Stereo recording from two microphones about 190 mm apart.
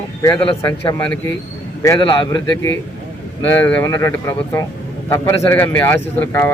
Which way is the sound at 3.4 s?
10° left (ahead or behind).